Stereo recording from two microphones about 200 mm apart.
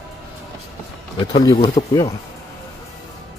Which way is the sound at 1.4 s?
20° left (ahead or behind).